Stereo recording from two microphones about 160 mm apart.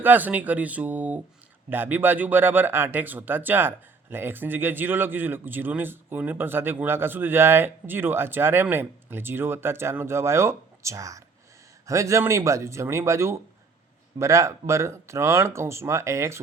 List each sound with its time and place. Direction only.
0.0 s speech: 10° right (ahead or behind)